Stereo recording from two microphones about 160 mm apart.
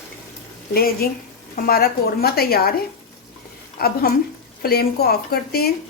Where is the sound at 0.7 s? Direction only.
70° left (ahead or behind).